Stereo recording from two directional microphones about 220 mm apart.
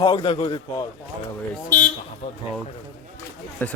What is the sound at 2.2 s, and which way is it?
Speech, 25° left (ahead or behind).